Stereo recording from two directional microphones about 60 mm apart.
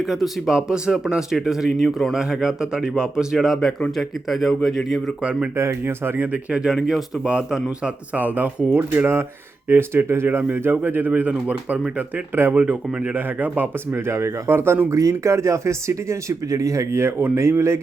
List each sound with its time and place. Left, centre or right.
0.0 s speech: centre
3.3 s speech: centre
5.2 s speech: centre
5.5 s speech: right
6.5 s speech: centre
8.1 s speech: right
13.1 s speech: right
14.8 s speech: right